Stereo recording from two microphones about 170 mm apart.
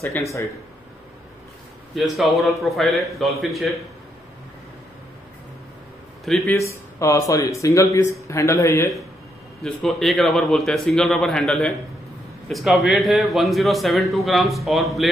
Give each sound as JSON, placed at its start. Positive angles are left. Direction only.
{"t": 2.0, "sound": "a man's voice", "side_deg": 0}
{"t": 6.2, "sound": "speech", "side_deg": 0}
{"t": 6.6, "sound": "speech", "side_deg": 15}
{"t": 9.6, "sound": "a man's voice", "side_deg": 0}